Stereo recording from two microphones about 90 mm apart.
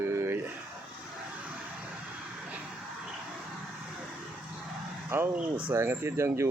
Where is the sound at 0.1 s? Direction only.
30° right (ahead or behind).